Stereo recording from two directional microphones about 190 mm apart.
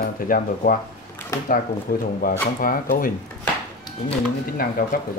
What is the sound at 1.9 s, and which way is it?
Speech, 50° left (ahead or behind).